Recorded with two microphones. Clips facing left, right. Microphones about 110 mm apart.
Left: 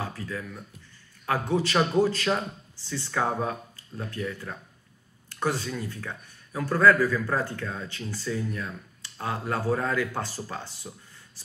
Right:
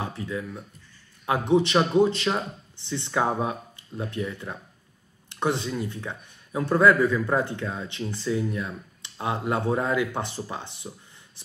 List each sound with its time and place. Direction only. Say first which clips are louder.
0.0 s speech: right 3 dB; 20° right (ahead or behind)